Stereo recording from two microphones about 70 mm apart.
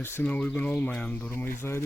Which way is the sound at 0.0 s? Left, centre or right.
Left.